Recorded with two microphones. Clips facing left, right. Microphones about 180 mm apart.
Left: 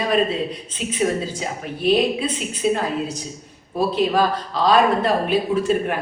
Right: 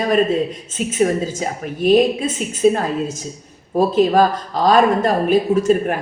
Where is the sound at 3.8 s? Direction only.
45° right (ahead or behind).